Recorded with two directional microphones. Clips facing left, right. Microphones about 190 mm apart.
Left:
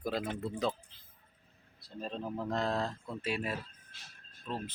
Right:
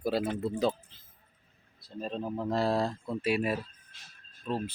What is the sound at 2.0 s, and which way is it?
Speech, 5° right (ahead or behind).